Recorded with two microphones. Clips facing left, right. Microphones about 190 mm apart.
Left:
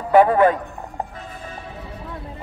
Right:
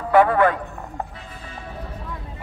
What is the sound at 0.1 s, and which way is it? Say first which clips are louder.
Speech: left 2 dB; 15° left (ahead or behind).